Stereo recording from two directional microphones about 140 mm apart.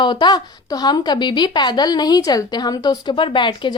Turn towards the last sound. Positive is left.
turn(degrees=35)  # may be behind; listen again after turning